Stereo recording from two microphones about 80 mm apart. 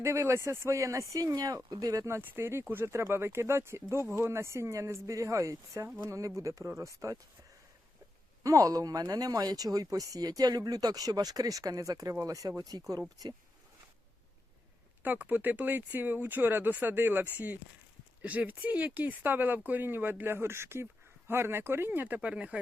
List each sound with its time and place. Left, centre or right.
0.0 s speech: right
1.3 s speech: right
2.2 s speech: right
8.4 s speech: right
15.0 s speech: right